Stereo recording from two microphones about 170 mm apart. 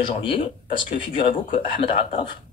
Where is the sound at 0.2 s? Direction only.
30° left (ahead or behind).